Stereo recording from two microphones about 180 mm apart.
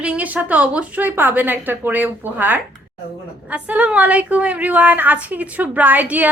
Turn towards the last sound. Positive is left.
turn(degrees=-10)  # may be behind; listen again after turning